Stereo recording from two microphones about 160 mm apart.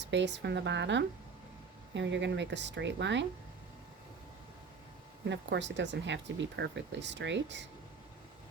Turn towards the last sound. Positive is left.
turn(degrees=-90)